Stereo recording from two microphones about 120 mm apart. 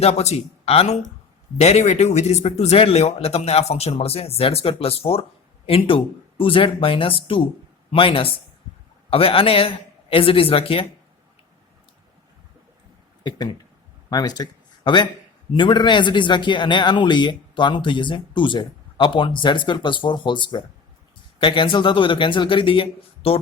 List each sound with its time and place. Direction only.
0.0 s speech: 60° left (ahead or behind)
13.2 s a man's voice: 35° left (ahead or behind); by 23.4 s 50° left (ahead or behind)